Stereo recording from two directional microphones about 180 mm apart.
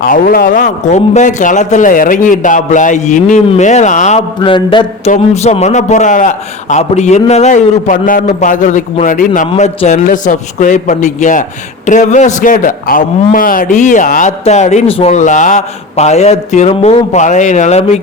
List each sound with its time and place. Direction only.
0.0 s a man's voice: 55° left (ahead or behind)
4.4 s speech: 25° left (ahead or behind)
5.1 s a man's voice: 40° left (ahead or behind)